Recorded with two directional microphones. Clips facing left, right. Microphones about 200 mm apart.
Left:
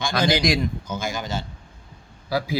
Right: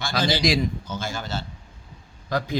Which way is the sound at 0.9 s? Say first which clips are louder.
Left 2 dB; 10° left (ahead or behind).